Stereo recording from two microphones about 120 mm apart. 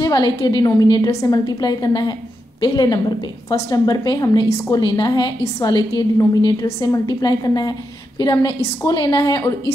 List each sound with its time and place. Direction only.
0.0 s a woman's voice: 35° left (ahead or behind)